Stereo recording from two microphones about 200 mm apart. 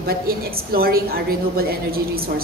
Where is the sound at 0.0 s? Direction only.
50° right (ahead or behind).